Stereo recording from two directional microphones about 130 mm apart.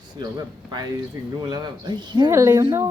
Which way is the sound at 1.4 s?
35° right (ahead or behind).